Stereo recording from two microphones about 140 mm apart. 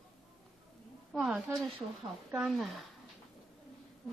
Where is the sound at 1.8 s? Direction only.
35° right (ahead or behind).